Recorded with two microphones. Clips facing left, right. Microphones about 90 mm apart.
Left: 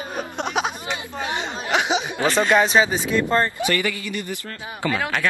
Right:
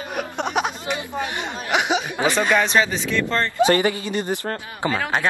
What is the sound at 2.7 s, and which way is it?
Speech, 10° left (ahead or behind).